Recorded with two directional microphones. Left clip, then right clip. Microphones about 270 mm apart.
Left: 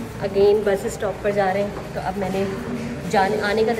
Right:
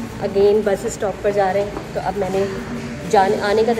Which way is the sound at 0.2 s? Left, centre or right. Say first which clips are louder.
Right 2 dB; centre.